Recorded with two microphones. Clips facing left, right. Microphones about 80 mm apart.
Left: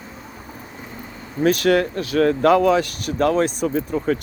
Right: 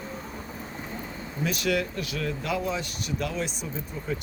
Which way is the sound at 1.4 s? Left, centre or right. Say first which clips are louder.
Left 10 dB; left.